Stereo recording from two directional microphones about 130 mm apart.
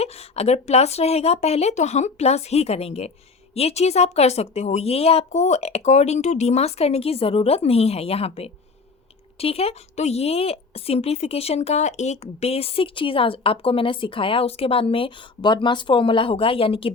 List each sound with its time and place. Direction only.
0.0 s a woman's voice: 55° left (ahead or behind)